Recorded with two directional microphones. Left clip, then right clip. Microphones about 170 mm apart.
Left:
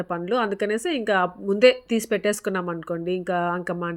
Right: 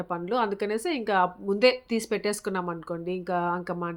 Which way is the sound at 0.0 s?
15° left (ahead or behind).